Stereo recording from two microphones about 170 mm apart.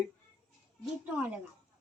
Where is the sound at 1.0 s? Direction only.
10° right (ahead or behind).